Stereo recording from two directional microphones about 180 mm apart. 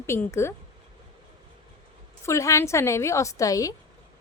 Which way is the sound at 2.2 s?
15° left (ahead or behind).